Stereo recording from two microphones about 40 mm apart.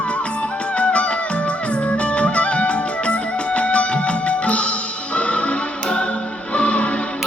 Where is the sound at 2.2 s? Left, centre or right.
Left.